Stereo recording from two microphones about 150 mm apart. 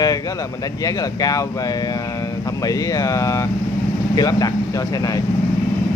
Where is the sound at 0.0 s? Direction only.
25° left (ahead or behind).